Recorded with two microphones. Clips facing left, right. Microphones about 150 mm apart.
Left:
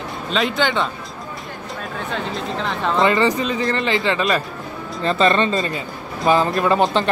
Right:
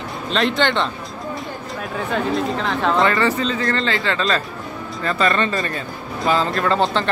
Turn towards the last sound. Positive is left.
turn(degrees=20)  # may be behind; listen again after turning